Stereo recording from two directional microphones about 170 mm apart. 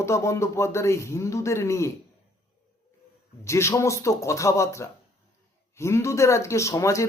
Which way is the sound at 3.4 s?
15° left (ahead or behind).